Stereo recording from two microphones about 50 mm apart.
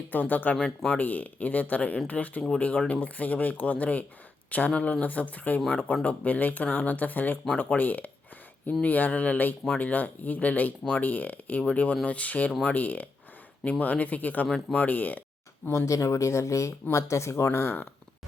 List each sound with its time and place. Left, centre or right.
0.1 s speech: left
14.5 s speech: left
14.8 s speech: left
15.9 s speech: left
17.4 s speech: left